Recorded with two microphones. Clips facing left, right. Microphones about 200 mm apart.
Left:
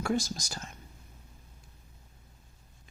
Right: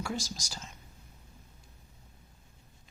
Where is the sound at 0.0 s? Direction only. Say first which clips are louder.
Left 6 dB; 55° left (ahead or behind).